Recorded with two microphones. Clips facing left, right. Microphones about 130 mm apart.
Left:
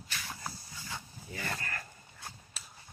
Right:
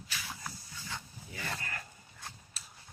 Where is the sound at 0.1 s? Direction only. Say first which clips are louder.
Left 1 dB; centre (ahead or behind).